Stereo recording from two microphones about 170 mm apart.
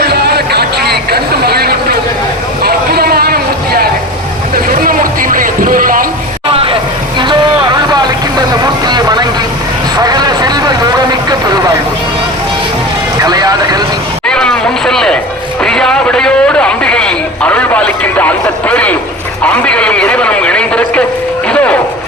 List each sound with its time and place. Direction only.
0.0 s a sound: 70° right (ahead or behind)
4.8 s vehicle: 55° right (ahead or behind)
6.5 s vehicle: 35° right (ahead or behind)
8.9 s vehicle: 25° right (ahead or behind)
13.2 s vehicle: 25° right (ahead or behind)
14.3 s a sound: 5° left (ahead or behind)
21.5 s vehicle: 5° left (ahead or behind)